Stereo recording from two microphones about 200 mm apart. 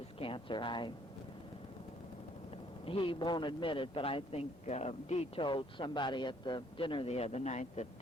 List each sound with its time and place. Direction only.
0.2 s a woman's voice: 25° left (ahead or behind)
2.8 s a man's voice: 25° left (ahead or behind)